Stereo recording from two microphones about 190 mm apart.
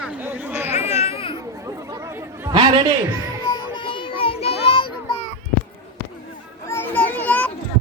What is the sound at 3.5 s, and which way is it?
Children playing, 25° left (ahead or behind).